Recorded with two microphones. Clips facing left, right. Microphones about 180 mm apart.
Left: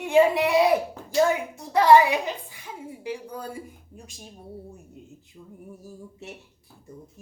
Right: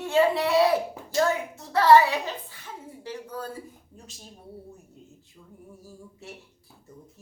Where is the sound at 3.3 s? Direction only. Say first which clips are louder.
Even; 15° left (ahead or behind).